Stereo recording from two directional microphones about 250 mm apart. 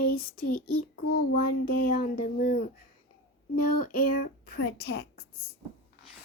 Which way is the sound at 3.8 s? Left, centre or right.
Left.